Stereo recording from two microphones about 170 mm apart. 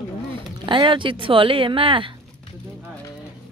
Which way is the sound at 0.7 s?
30° right (ahead or behind).